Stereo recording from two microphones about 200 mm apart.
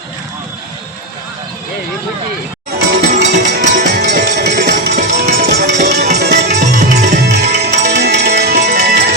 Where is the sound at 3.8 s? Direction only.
55° right (ahead or behind).